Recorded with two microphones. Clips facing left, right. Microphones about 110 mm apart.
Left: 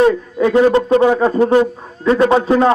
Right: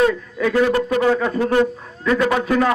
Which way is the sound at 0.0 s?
30° left (ahead or behind).